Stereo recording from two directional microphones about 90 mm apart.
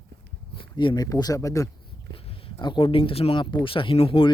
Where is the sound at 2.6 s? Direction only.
60° left (ahead or behind); by 4.3 s 85° left.